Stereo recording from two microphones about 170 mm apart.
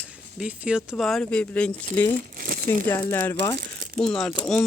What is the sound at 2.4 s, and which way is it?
Crumpling, 60° right (ahead or behind).